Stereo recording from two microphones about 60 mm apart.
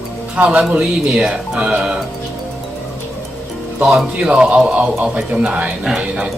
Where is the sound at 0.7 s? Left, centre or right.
Centre.